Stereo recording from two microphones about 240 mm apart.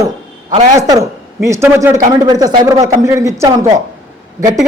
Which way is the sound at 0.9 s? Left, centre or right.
Centre.